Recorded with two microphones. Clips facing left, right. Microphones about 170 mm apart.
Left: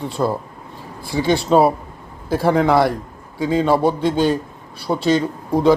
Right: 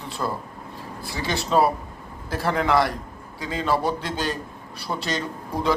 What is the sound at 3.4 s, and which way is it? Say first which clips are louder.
Speech: left 12 dB; centre (ahead or behind).